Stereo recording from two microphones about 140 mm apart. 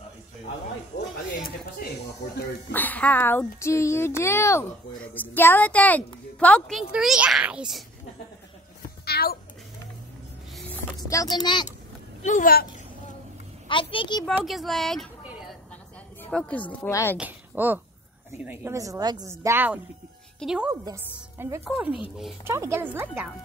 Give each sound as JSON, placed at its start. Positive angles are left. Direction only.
{"t": 1.8, "sound": "speech", "side_deg": 90}
{"t": 2.7, "sound": "speech", "side_deg": 10}
{"t": 6.9, "sound": "a child's voice", "side_deg": -5}
{"t": 9.0, "sound": "cat", "side_deg": 90}
{"t": 11.0, "sound": "a child's voice", "side_deg": 25}
{"t": 12.2, "sound": "speech", "side_deg": 65}
{"t": 13.7, "sound": "a child's voice", "side_deg": 40}
{"t": 14.2, "sound": "a child's voice", "side_deg": 0}
{"t": 16.2, "sound": "speech", "side_deg": 10}
{"t": 17.2, "sound": "a woman's voice", "side_deg": -15}
{"t": 21.4, "sound": "speech", "side_deg": -15}